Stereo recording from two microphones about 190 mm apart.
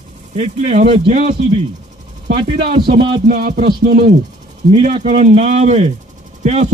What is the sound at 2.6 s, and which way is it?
Music, 25° right (ahead or behind).